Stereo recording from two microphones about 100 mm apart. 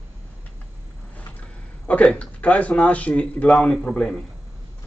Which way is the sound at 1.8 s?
15° left (ahead or behind).